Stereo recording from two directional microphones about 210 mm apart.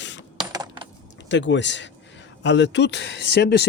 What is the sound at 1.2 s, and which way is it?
Speech, 60° left (ahead or behind).